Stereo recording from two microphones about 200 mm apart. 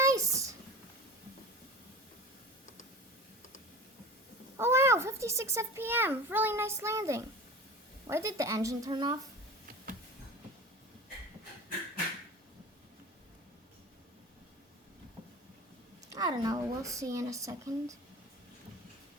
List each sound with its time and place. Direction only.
0.0 s a sound: 15° right (ahead or behind)
4.5 s a child's voice: 10° right (ahead or behind)
16.0 s speech: 15° right (ahead or behind)